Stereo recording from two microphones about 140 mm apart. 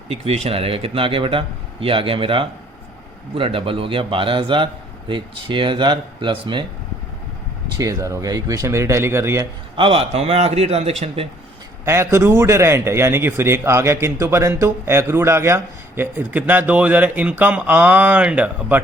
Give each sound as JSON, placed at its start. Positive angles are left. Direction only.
{"t": 0.1, "sound": "a man's voice", "side_deg": -45}
{"t": 7.8, "sound": "speech", "side_deg": -25}
{"t": 9.7, "sound": "a man's voice", "side_deg": -40}
{"t": 11.9, "sound": "a man's voice", "side_deg": -20}